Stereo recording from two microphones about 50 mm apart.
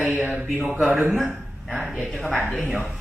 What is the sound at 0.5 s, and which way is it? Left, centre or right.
Speech, right.